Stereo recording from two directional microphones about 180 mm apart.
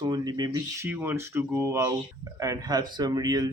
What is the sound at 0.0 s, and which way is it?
Speech, 20° right (ahead or behind).